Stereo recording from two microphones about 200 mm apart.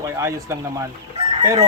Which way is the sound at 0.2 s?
15° right (ahead or behind).